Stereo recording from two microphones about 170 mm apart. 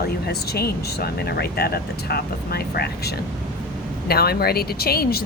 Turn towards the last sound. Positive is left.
turn(degrees=65)  # may be behind; listen again after turning